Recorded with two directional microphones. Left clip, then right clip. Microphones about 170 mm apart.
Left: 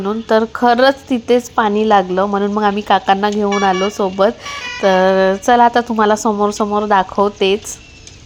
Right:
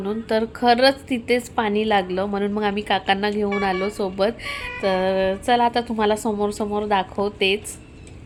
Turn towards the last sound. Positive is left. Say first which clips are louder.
# left 7 dB
turn(degrees=25)  # may be behind; listen again after turning